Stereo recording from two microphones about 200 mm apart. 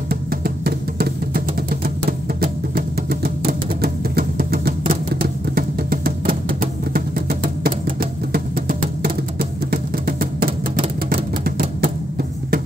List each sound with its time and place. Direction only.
0.1 s music: 50° right (ahead or behind)